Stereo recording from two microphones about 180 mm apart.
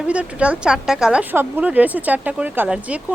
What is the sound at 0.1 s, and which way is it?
Speech, 5° right (ahead or behind).